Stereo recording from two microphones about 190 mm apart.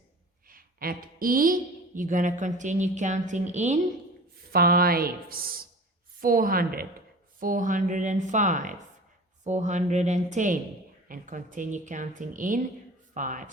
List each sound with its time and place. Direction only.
0.4 s a sound: 50° right (ahead or behind)
2.0 s a woman's voice: 45° right (ahead or behind)
4.5 s a woman's voice: 50° right (ahead or behind)